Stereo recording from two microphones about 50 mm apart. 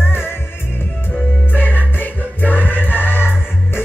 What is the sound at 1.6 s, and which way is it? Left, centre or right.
Music, left.